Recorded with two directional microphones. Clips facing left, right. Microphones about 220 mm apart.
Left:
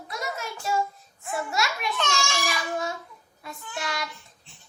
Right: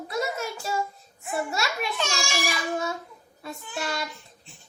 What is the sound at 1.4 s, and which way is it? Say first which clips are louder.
Speech: right 1 dB; 25° right (ahead or behind).